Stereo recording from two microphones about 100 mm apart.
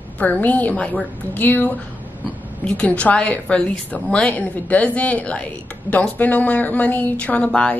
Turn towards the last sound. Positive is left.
turn(degrees=10)  # may be behind; listen again after turning